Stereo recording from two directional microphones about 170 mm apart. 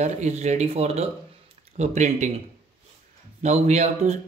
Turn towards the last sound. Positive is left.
turn(degrees=-40)  # may be behind; listen again after turning